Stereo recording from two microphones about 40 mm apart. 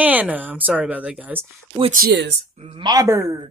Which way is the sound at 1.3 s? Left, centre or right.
Right.